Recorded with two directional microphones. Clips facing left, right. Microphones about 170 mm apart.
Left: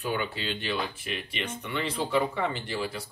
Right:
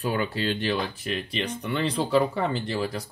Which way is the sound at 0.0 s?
40° right (ahead or behind).